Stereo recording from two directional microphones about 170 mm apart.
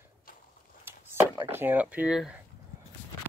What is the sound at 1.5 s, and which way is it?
Speech, 10° right (ahead or behind).